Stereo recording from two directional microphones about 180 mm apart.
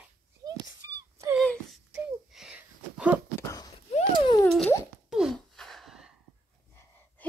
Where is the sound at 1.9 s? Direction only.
5° right (ahead or behind).